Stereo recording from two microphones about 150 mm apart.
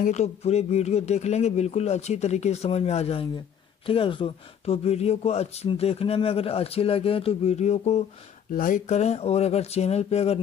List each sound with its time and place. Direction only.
0.0 s speech: 50° left (ahead or behind)
8.5 s speech: 60° left (ahead or behind); by 10.4 s 45° left (ahead or behind)